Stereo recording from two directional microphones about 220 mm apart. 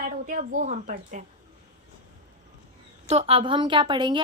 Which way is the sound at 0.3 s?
35° right (ahead or behind).